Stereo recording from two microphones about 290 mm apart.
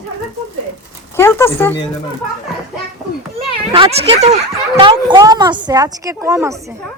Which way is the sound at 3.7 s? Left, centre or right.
Centre.